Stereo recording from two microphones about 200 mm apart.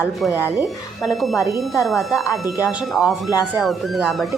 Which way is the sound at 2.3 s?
15° left (ahead or behind).